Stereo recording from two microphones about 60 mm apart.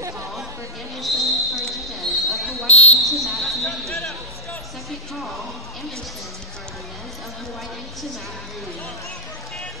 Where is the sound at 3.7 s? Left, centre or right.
Centre.